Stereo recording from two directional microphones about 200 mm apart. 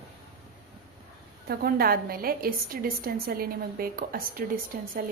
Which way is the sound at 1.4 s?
50° right (ahead or behind).